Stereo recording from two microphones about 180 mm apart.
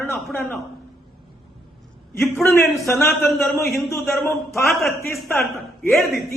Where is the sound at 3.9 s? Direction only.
15° left (ahead or behind).